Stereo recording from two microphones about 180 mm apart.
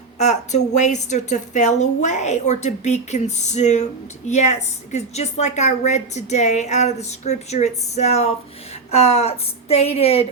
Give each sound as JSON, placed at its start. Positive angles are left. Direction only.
{"t": 0.2, "sound": "a woman's voice", "side_deg": 40}